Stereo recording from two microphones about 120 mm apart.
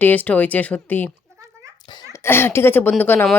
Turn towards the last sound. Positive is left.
turn(degrees=15)  # may be behind; listen again after turning